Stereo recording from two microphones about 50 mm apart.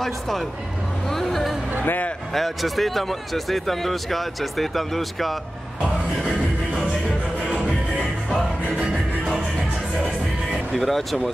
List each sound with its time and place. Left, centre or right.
0.0 s speech: centre
1.0 s vehicle: centre
1.9 s a man's voice: left
2.3 s speech: centre
10.5 s speech: centre